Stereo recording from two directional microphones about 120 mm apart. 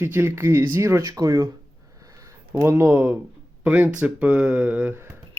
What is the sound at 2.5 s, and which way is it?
Speech, 20° right (ahead or behind).